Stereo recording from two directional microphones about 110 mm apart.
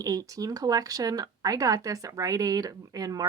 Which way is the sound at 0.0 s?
35° right (ahead or behind).